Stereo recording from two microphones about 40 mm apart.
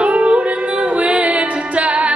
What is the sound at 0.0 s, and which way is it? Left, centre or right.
Music, right.